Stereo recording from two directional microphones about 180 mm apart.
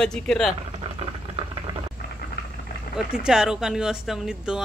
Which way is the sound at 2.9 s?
5° right (ahead or behind).